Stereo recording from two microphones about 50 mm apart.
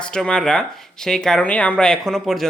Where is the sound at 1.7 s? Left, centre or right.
Centre.